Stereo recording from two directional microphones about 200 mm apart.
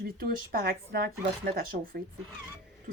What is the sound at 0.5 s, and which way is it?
Speech, 50° right (ahead or behind).